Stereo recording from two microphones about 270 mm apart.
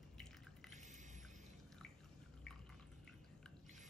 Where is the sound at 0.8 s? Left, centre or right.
Right.